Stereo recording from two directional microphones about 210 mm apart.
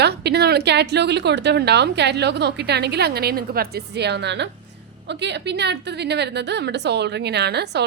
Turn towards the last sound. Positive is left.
turn(degrees=-50)  # may be behind; listen again after turning